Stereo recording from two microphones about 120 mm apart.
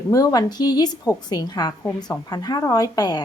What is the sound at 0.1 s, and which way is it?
Speech, 30° left (ahead or behind).